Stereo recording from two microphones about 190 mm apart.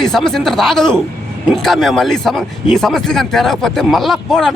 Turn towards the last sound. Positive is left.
turn(degrees=0)  # may be behind; listen again after turning